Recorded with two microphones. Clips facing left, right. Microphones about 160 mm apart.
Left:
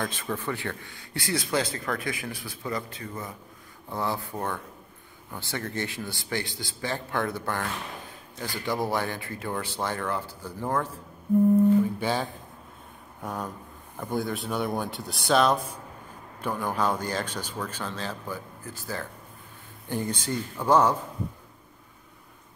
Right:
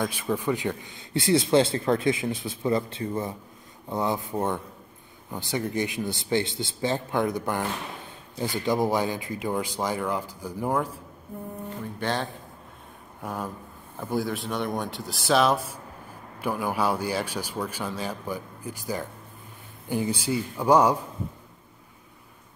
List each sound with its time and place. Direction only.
0.0 s speech: 10° right (ahead or behind); by 3.3 s 30° right (ahead or behind)
3.9 s speech: 20° right (ahead or behind)
12.0 s speech: 5° left (ahead or behind); by 21.0 s 10° right (ahead or behind)